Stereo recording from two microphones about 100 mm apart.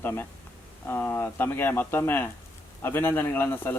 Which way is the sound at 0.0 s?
20° left (ahead or behind).